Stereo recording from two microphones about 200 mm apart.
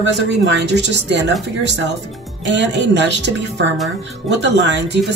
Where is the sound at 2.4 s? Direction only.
60° right (ahead or behind).